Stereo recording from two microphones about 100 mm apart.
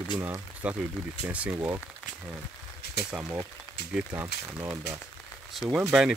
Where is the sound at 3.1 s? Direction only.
25° right (ahead or behind).